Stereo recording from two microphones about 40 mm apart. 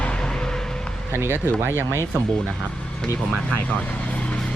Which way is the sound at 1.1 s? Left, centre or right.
Right.